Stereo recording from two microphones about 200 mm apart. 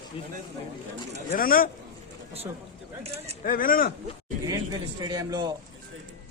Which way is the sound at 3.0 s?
30° right (ahead or behind).